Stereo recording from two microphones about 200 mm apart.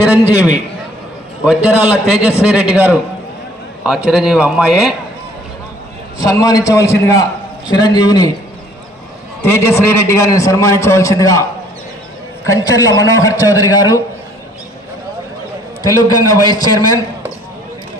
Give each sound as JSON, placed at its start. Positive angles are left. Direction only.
{"t": 1.5, "sound": "a man's voice", "side_deg": -5}
{"t": 6.1, "sound": "a man's voice", "side_deg": 15}
{"t": 9.4, "sound": "a man's voice", "side_deg": 15}
{"t": 12.5, "sound": "a man's voice", "side_deg": 15}
{"t": 16.0, "sound": "a man's voice", "side_deg": 20}